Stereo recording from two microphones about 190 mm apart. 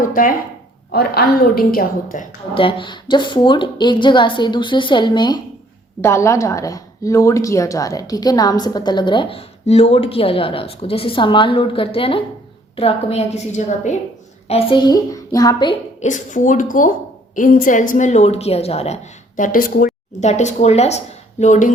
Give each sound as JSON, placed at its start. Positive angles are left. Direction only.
{"t": 0.0, "sound": "a woman's voice", "side_deg": 45}
{"t": 2.6, "sound": "a woman's voice", "side_deg": 25}
{"t": 16.0, "sound": "a woman's voice", "side_deg": 40}
{"t": 19.4, "sound": "a woman's voice", "side_deg": 45}